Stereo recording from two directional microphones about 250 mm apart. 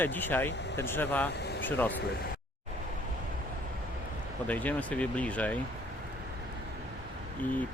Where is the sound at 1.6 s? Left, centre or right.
Centre.